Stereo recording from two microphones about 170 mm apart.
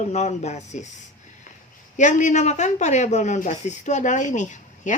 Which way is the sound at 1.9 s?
45° left (ahead or behind).